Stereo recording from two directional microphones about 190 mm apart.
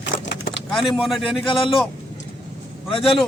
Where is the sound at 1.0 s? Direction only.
Centre (ahead or behind).